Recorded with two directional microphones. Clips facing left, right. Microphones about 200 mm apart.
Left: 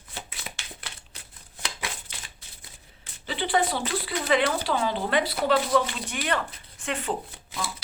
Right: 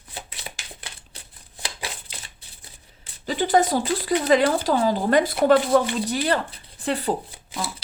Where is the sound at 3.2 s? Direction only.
45° right (ahead or behind).